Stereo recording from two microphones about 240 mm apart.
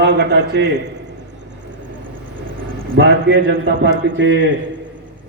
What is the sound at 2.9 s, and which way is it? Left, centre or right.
A man's voice, right.